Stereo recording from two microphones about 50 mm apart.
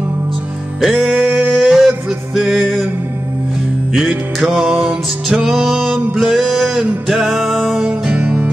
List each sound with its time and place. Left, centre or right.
0.7 s music: centre
1.2 s a sound: right
1.6 s a sound: centre
2.3 s music: centre
4.4 s music: centre
7.7 s music: right